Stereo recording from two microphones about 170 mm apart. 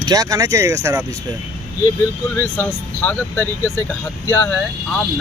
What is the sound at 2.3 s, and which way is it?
Speech, 10° left (ahead or behind).